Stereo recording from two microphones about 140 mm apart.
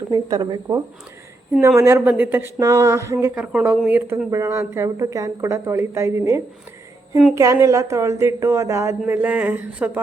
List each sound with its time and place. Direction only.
0.1 s speech: 25° right (ahead or behind)
3.3 s speech: 10° right (ahead or behind)